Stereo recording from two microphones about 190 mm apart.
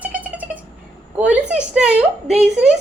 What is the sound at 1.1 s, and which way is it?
Speech, 5° right (ahead or behind).